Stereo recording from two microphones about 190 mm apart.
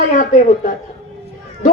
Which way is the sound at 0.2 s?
45° left (ahead or behind).